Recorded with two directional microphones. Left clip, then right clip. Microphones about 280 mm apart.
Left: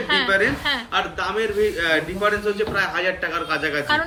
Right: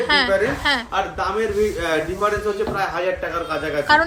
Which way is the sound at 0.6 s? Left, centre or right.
Centre.